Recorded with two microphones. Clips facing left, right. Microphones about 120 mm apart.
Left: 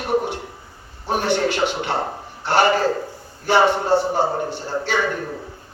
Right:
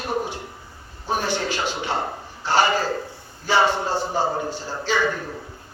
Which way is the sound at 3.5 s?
60° left (ahead or behind).